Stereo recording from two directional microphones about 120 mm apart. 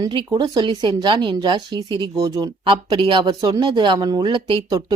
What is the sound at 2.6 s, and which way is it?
Speech, 45° right (ahead or behind).